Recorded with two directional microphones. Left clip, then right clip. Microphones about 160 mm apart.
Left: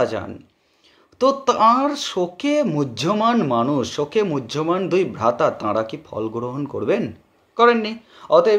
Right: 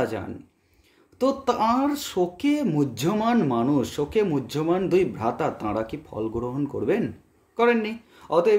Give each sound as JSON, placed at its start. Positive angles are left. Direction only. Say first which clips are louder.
{"t": 0.0, "sound": "speech", "louder": "left 6 dB", "side_deg": -20}